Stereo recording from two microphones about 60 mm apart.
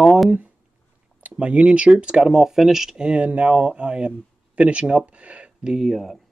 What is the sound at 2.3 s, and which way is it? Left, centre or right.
Speech, centre.